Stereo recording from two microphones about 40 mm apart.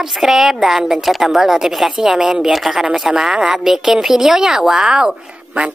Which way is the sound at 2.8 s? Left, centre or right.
Centre.